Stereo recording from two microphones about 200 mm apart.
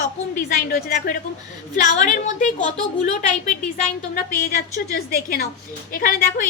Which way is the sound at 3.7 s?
40° left (ahead or behind).